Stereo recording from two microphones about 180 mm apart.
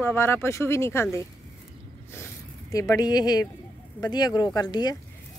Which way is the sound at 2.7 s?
20° left (ahead or behind).